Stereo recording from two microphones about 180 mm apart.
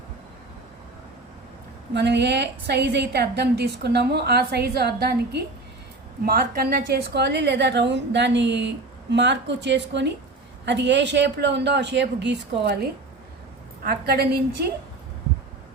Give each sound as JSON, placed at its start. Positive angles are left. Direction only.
{"t": 1.9, "sound": "a woman's voice", "side_deg": -70}
{"t": 13.8, "sound": "a woman's voice", "side_deg": -60}